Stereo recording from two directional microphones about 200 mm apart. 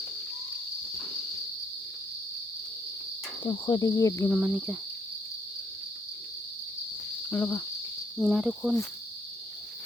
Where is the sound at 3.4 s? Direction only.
20° left (ahead or behind).